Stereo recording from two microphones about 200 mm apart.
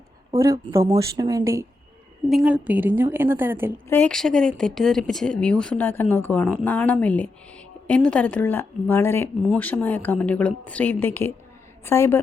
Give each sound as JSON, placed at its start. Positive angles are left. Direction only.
{"t": 0.3, "sound": "a woman's voice", "side_deg": -15}
{"t": 2.3, "sound": "a woman's voice", "side_deg": -5}
{"t": 3.8, "sound": "a woman's voice", "side_deg": 10}